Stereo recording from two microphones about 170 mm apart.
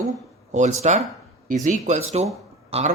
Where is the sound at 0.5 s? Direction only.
45° right (ahead or behind).